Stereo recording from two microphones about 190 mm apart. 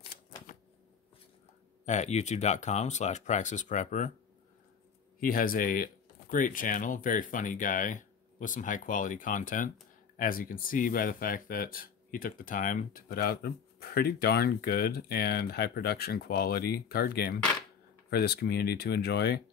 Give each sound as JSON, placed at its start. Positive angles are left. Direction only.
{"t": 1.9, "sound": "speech", "side_deg": 35}
{"t": 5.2, "sound": "speech", "side_deg": 50}